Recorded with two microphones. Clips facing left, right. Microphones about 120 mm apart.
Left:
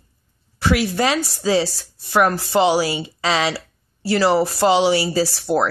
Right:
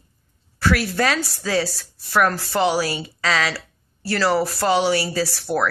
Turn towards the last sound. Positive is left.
turn(degrees=25)  # may be behind; listen again after turning